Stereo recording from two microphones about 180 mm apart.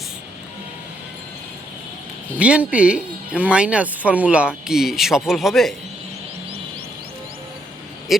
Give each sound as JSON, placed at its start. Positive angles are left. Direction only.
{"t": 2.4, "sound": "speech", "side_deg": -5}
{"t": 8.1, "sound": "speech", "side_deg": 0}